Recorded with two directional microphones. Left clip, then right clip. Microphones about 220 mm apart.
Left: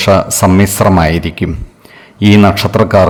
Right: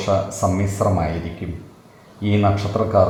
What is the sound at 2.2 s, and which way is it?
Speech, 45° left (ahead or behind).